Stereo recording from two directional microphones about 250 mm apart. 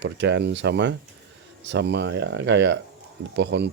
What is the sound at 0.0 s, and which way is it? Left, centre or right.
Speech, right.